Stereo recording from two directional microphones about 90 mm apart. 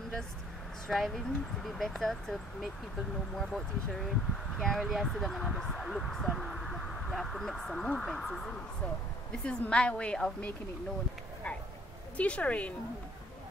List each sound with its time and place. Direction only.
0.8 s a woman's voice: 5° left (ahead or behind)
12.2 s a woman's voice: 15° left (ahead or behind)